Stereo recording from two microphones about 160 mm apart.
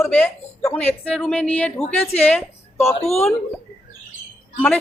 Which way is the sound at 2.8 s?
40° left (ahead or behind).